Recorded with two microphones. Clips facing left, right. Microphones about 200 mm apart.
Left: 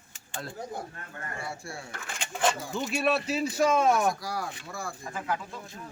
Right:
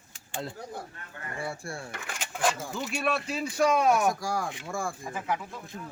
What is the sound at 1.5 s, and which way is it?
Speech, 55° right (ahead or behind).